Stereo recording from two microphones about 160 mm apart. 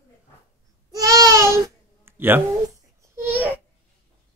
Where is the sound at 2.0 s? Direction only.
15° right (ahead or behind).